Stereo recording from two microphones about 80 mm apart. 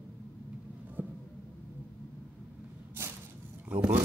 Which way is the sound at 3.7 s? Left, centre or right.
Centre.